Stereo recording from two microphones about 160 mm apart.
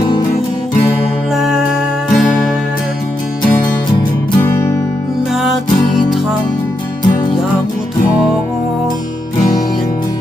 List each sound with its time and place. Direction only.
1.4 s music: centre (ahead or behind)
4.4 s music: 15° left (ahead or behind)
5.3 s music: centre (ahead or behind)